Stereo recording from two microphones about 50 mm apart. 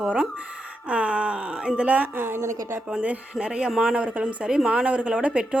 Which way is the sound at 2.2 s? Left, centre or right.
Right.